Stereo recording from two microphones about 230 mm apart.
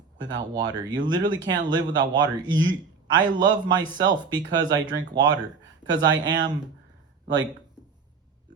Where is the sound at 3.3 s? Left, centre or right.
Centre.